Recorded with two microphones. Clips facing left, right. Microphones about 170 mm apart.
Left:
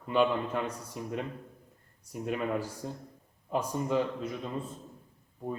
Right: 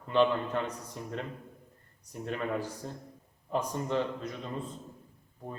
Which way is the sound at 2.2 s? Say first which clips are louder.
Left 2 dB; 10° left (ahead or behind).